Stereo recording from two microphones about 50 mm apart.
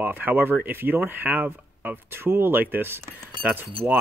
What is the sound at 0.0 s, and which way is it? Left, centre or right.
Speech, right.